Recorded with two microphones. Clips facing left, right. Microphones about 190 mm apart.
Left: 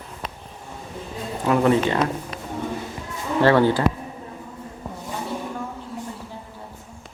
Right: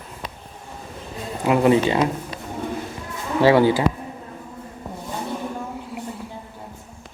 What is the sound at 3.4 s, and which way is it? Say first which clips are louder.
Speech: right 2 dB; 10° right (ahead or behind).